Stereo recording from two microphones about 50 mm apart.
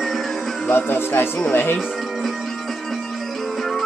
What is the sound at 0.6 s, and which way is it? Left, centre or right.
Speech, left.